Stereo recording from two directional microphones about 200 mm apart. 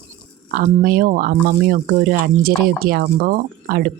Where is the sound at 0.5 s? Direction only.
45° right (ahead or behind).